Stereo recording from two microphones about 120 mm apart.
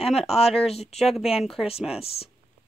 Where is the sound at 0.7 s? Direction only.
60° left (ahead or behind).